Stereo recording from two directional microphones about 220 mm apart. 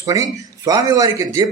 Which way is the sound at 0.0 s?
15° right (ahead or behind).